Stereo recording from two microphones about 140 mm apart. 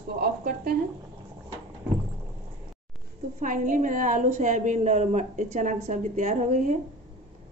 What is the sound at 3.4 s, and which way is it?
A woman's voice, 70° right (ahead or behind).